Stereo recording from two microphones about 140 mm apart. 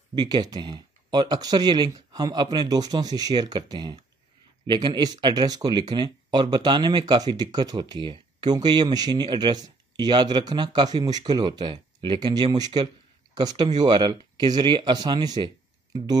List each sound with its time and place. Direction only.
0.1 s speech: 30° right (ahead or behind)